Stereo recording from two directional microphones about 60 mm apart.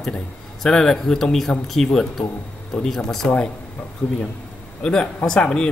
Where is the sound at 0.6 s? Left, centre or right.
Centre.